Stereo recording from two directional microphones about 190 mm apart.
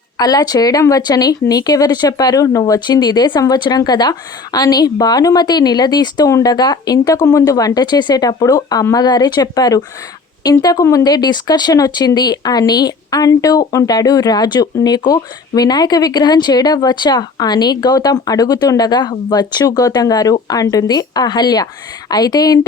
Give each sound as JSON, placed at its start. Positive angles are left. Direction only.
{"t": 0.2, "sound": "speech", "side_deg": 20}